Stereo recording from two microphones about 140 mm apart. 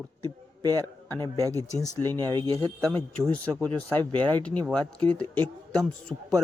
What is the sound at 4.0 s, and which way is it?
Speech, 30° right (ahead or behind).